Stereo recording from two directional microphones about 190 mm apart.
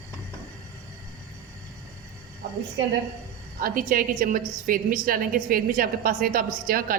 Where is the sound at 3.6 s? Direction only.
50° right (ahead or behind).